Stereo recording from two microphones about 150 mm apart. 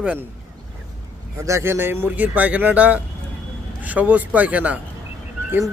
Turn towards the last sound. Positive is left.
turn(degrees=-15)  # may be behind; listen again after turning